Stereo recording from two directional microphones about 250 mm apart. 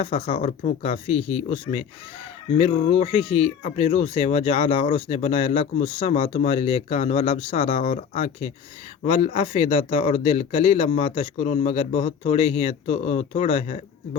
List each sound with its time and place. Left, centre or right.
0.0 s speech: left